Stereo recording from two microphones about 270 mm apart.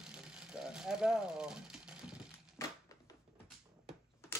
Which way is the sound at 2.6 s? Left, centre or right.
Centre.